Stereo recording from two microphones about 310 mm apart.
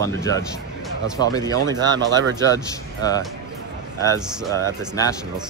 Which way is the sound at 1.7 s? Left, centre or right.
Centre.